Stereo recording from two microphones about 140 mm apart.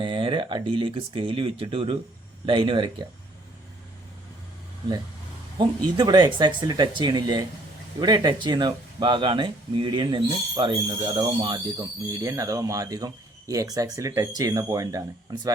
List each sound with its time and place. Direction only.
0.0 s speech: 35° right (ahead or behind)
5.5 s speech: 30° right (ahead or behind)